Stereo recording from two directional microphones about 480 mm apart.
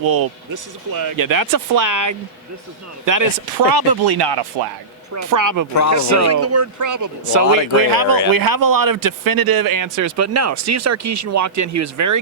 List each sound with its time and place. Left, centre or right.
0.0 s a man's voice: right
5.1 s a man's voice: right